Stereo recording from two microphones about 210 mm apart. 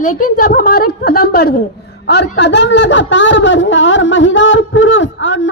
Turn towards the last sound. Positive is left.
turn(degrees=65)  # may be behind; listen again after turning